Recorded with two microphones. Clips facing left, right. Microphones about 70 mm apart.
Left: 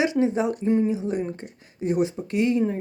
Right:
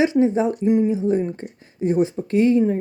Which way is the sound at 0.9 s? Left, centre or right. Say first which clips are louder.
Right 6 dB; right.